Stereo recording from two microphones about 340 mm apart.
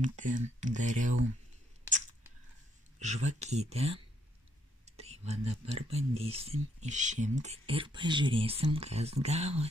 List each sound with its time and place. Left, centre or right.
0.0 s speech: right
3.0 s speech: centre
4.8 s a sound: centre
5.9 s speech: centre